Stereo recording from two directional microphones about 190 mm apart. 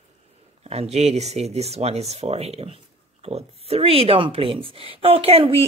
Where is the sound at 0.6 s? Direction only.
35° right (ahead or behind).